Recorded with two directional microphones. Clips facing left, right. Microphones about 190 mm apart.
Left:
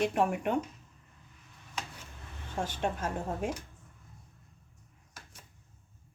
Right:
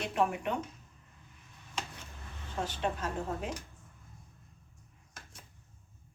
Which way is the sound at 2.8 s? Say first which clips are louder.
Left 1 dB; 50° left (ahead or behind).